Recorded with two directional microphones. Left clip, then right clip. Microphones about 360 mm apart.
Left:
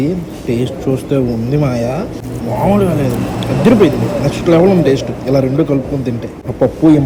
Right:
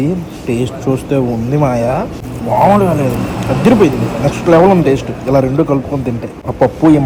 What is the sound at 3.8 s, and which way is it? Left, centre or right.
Speech, centre.